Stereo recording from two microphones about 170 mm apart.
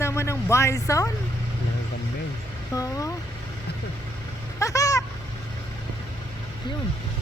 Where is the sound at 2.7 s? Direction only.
20° left (ahead or behind).